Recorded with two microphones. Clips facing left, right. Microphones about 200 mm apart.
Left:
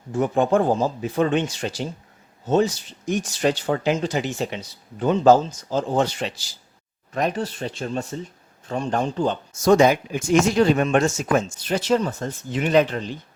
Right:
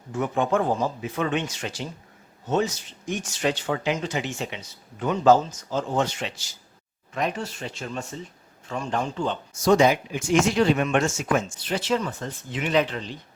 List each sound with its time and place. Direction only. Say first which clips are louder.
0.1 s speech: left 4 dB; 35° left (ahead or behind)